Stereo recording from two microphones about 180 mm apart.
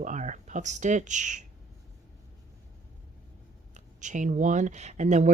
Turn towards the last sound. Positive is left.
turn(degrees=-40)  # may be behind; listen again after turning